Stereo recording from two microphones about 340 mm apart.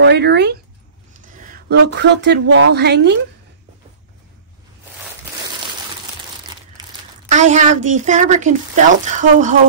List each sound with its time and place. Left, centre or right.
0.0 s a woman's voice: right
1.1 s a sound: right
2.0 s a woman's voice: right
7.2 s a woman's voice: right